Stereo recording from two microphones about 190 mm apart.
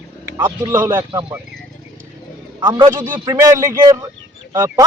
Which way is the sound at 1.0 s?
25° right (ahead or behind).